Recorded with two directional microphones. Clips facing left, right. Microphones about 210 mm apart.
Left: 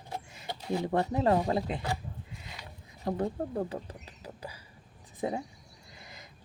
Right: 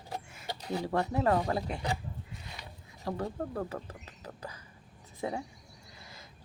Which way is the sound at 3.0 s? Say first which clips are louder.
Left 3 dB; 20° left (ahead or behind).